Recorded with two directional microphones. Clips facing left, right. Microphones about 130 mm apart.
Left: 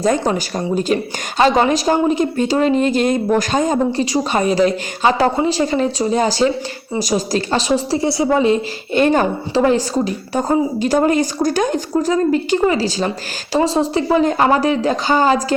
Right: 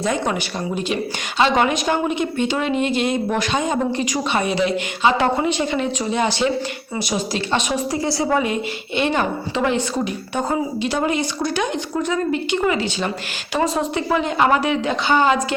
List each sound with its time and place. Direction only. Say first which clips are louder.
0.0 s a woman's voice: left 5 dB; 40° left (ahead or behind)
9.0 s a woman's voice: left 6 dB; 40° left (ahead or behind)